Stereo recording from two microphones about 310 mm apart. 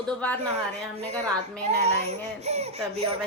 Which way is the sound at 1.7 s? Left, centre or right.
Right.